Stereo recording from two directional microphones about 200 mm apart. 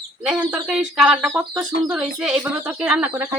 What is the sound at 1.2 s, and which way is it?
Speech, 15° right (ahead or behind).